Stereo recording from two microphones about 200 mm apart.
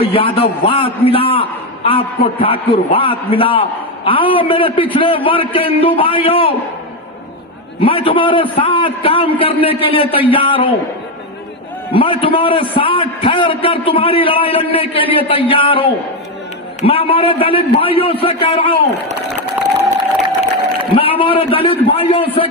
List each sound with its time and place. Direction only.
0.0 s a man's voice: 25° left (ahead or behind)
7.8 s a man's voice: 25° left (ahead or behind)
11.9 s a man's voice: 25° left (ahead or behind)
20.9 s a man's voice: 25° left (ahead or behind)